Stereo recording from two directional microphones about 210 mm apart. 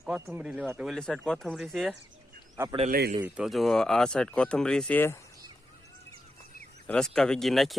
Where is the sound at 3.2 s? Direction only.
Centre (ahead or behind).